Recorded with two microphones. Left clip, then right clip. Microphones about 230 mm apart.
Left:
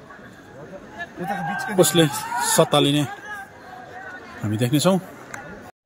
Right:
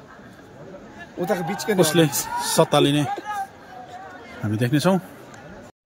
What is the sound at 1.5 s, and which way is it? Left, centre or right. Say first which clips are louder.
Speech: even; right.